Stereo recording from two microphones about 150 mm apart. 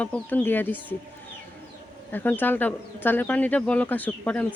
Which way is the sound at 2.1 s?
10° left (ahead or behind).